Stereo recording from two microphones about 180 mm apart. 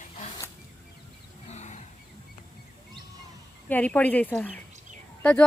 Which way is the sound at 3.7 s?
10° left (ahead or behind).